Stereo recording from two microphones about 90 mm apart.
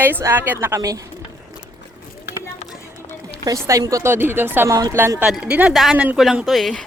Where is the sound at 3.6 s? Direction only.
35° right (ahead or behind).